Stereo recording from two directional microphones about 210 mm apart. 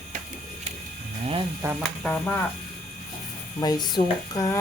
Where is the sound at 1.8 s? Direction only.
5° left (ahead or behind).